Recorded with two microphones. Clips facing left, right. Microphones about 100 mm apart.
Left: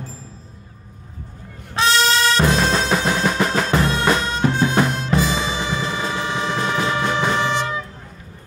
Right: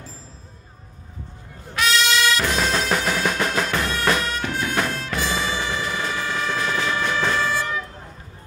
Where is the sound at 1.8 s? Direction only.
35° left (ahead or behind).